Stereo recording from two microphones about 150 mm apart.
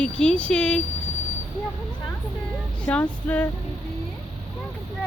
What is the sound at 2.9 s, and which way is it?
Female singing, 10° left (ahead or behind).